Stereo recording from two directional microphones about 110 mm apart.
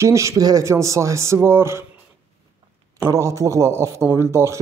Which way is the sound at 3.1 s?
25° right (ahead or behind).